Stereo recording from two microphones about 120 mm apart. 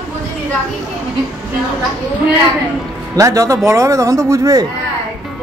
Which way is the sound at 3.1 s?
30° right (ahead or behind).